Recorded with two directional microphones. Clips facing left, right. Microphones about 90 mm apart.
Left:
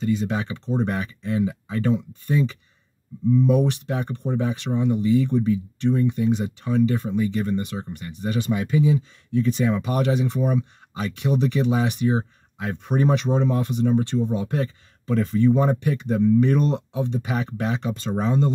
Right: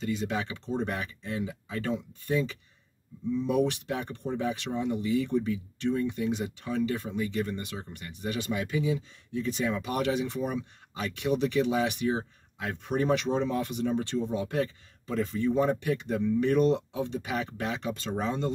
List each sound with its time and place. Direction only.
0.0 s speech: 35° left (ahead or behind)
15.0 s speech: 50° left (ahead or behind)
16.9 s speech: 25° left (ahead or behind)
17.2 s speech: 35° left (ahead or behind)